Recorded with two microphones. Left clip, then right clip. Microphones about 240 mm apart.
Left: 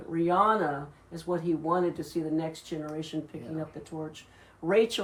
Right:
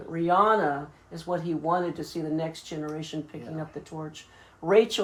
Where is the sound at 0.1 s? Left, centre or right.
Centre.